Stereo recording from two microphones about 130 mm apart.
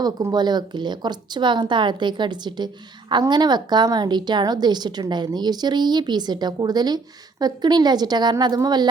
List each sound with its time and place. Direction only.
0.0 s a woman's voice: 30° right (ahead or behind)